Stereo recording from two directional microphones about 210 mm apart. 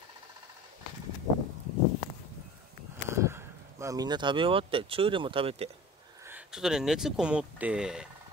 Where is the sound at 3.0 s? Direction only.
10° right (ahead or behind); by 5.7 s 30° right (ahead or behind).